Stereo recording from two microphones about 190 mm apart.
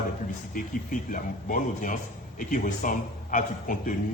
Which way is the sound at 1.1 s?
45° left (ahead or behind).